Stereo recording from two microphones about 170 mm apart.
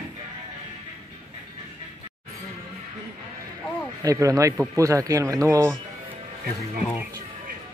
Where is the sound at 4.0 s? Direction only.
20° right (ahead or behind).